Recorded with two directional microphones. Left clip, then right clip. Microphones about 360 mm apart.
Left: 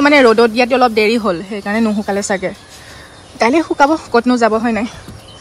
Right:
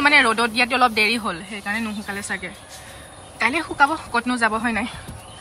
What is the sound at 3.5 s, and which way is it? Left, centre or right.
Speech, centre.